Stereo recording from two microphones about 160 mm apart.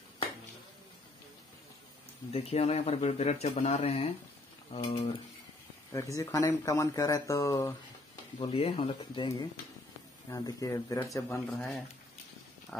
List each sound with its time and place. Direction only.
2.3 s speech: 40° left (ahead or behind)
6.1 s speech: 20° left (ahead or behind)
8.4 s speech: 35° left (ahead or behind)
10.3 s speech: 20° left (ahead or behind)
11.4 s speech: centre (ahead or behind)